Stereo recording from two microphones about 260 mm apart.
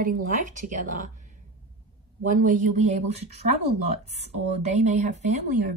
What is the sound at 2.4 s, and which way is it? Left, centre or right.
Speech, right.